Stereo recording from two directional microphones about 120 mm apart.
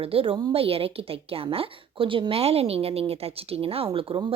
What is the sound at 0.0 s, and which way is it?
A woman's voice, 50° right (ahead or behind).